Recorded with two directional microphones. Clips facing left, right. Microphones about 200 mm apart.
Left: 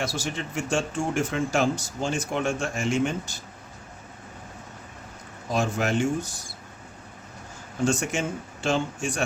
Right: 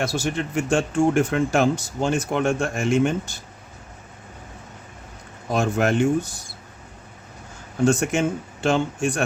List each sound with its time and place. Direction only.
0.0 s speech: 60° right (ahead or behind)
5.5 s speech: 55° right (ahead or behind)
7.9 s speech: 55° right (ahead or behind)